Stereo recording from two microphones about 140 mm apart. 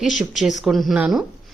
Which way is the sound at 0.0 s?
Centre (ahead or behind).